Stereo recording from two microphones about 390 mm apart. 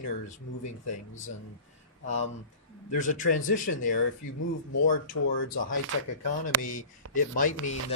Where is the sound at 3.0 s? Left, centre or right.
Centre.